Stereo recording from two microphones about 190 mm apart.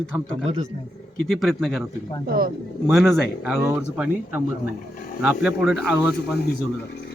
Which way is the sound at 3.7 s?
10° right (ahead or behind).